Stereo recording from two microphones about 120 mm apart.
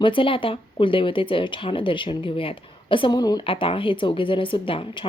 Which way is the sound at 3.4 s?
50° left (ahead or behind).